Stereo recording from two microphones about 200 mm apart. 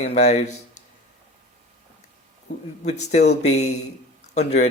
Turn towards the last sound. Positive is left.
turn(degrees=35)  # may be behind; listen again after turning